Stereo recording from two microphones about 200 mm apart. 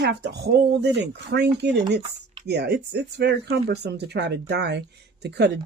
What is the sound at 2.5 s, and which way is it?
Speech, 55° right (ahead or behind).